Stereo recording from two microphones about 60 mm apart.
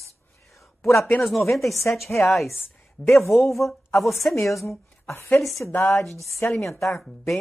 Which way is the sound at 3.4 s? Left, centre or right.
Left.